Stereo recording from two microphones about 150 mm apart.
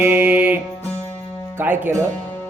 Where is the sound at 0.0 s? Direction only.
15° right (ahead or behind).